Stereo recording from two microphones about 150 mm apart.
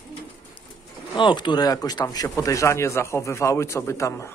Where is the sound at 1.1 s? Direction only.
30° left (ahead or behind).